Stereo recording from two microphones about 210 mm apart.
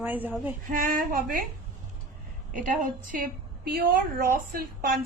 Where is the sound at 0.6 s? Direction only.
40° right (ahead or behind).